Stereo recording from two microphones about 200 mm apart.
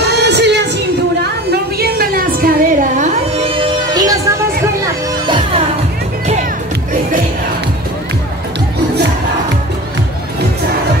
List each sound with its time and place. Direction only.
0.0 s music: 55° right (ahead or behind)
1.5 s a sound: 50° right (ahead or behind)
3.3 s music: 25° right (ahead or behind)
5.2 s music: 25° right (ahead or behind)